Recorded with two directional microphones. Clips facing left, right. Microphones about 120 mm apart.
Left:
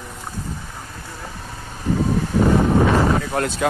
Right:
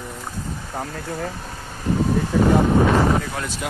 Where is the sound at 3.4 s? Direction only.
50° left (ahead or behind).